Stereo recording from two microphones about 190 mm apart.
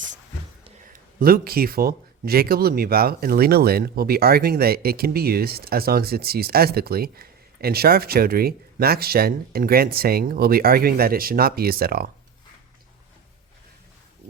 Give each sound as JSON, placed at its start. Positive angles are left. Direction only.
{"t": 1.2, "sound": "speech", "side_deg": -50}